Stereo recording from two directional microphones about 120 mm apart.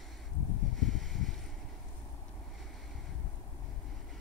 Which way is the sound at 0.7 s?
Centre (ahead or behind).